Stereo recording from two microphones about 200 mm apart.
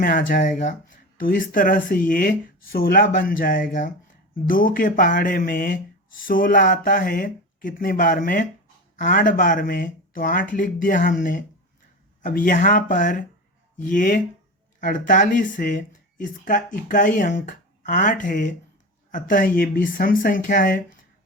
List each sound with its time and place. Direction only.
0.0 s speech: 45° left (ahead or behind)